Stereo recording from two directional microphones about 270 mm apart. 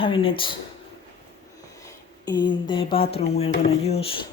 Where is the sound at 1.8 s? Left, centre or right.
Centre.